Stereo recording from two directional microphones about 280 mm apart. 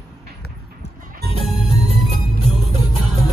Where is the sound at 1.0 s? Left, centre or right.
Right.